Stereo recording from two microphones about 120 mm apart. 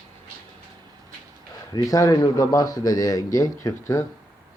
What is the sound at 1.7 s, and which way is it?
A man's voice, 30° left (ahead or behind).